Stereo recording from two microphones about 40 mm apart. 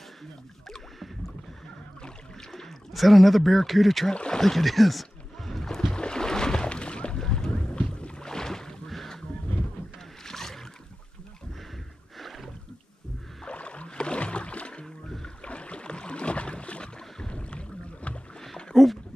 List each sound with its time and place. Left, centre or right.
2.5 s speech: centre
4.1 s speech: left
4.4 s boat: centre
5.9 s a sound: centre
7.2 s boat: centre
7.7 s boat: left
8.3 s boat: centre
8.9 s wild animals: centre
10.2 s boat: centre
12.2 s a sound: centre
13.5 s rowboat: left
15.0 s boat: centre
15.4 s boat: left
18.7 s dog: centre